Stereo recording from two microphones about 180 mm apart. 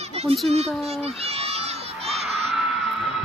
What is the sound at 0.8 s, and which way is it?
Speech, 35° right (ahead or behind).